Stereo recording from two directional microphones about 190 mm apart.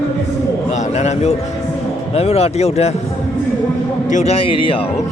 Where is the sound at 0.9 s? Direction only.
35° left (ahead or behind).